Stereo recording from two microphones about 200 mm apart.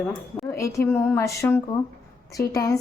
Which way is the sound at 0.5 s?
15° left (ahead or behind).